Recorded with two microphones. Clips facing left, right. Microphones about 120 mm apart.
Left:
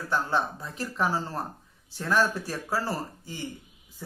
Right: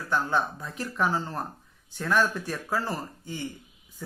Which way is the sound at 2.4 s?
35° left (ahead or behind).